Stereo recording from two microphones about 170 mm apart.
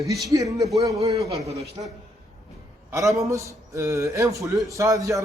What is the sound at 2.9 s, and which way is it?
A man's voice, 20° right (ahead or behind).